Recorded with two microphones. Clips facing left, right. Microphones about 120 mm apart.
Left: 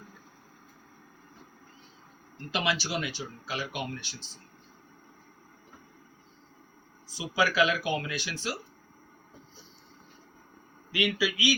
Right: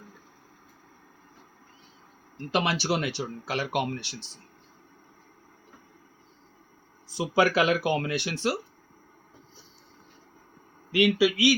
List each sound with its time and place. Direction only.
2.5 s speech: 55° right (ahead or behind)
7.2 s speech: 60° right (ahead or behind)
10.9 s speech: 65° right (ahead or behind)